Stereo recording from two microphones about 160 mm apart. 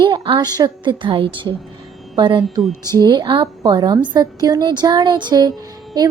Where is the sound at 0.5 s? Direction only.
25° right (ahead or behind).